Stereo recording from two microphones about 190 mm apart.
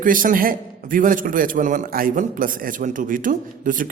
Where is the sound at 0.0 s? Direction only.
45° right (ahead or behind).